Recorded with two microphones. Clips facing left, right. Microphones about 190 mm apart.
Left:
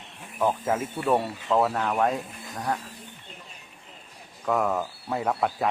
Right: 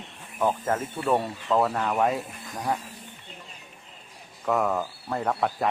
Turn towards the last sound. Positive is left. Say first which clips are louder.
# even
turn(degrees=0)  # may be behind; listen again after turning